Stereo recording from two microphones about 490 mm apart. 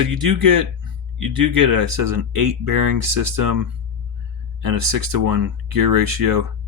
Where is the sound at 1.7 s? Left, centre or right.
Right.